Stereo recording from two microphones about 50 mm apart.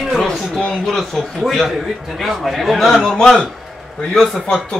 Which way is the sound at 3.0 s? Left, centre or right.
Centre.